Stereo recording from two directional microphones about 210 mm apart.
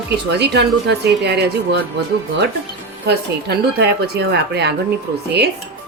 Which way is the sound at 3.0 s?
50° right (ahead or behind).